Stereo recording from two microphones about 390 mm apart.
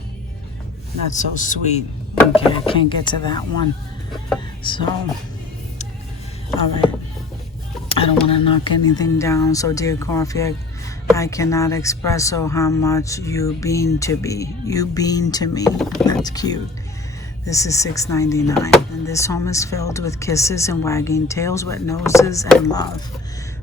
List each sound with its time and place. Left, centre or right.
1.1 s speech: centre
4.6 s speech: centre
7.9 s speech: centre